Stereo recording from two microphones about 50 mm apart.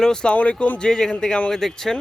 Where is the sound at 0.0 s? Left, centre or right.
Centre.